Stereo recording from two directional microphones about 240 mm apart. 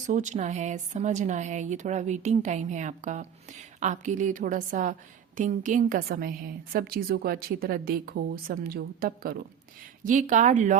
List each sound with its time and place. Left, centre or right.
0.1 s a woman's voice: right